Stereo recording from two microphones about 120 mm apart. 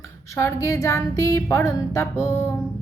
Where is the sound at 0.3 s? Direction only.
25° left (ahead or behind).